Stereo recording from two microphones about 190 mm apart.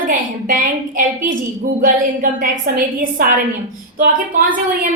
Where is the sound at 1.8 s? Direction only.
45° right (ahead or behind).